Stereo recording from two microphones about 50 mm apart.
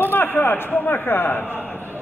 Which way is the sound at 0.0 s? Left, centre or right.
Left.